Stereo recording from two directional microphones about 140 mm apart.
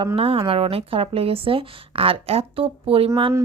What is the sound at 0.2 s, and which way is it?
A woman's voice, 40° right (ahead or behind).